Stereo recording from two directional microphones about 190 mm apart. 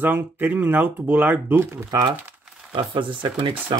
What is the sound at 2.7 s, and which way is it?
Speech, 25° right (ahead or behind).